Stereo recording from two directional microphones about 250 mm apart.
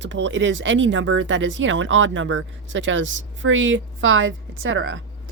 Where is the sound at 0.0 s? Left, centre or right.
Right.